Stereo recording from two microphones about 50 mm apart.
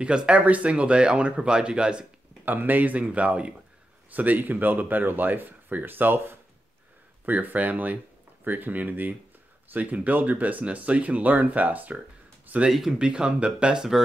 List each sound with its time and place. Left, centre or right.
0.0 s speech: right
2.4 s speech: right
7.2 s speech: right
13.0 s speech: right